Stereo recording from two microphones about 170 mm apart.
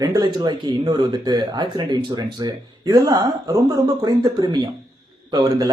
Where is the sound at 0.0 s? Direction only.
20° right (ahead or behind).